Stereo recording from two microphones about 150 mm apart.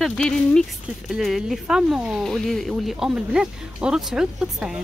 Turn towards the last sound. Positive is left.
turn(degrees=-5)  # may be behind; listen again after turning